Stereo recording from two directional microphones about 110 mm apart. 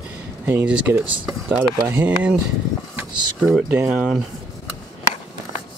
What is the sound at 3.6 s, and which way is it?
Speech, 10° right (ahead or behind).